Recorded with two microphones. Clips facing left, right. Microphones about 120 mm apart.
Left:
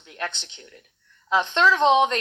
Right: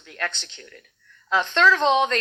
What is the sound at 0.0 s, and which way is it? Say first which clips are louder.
Speech: right 1 dB; 20° left (ahead or behind).